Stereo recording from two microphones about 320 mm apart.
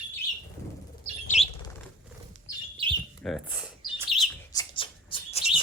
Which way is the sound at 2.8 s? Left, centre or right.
Centre.